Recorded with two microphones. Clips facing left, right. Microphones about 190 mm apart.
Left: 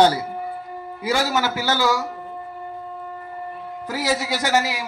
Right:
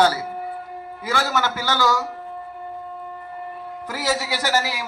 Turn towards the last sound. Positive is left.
turn(degrees=15)  # may be behind; listen again after turning